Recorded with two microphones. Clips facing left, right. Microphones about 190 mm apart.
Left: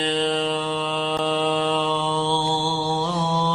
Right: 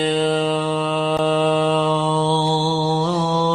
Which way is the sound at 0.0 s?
5° right (ahead or behind).